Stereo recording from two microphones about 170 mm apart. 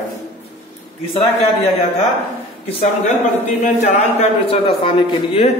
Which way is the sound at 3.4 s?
40° left (ahead or behind).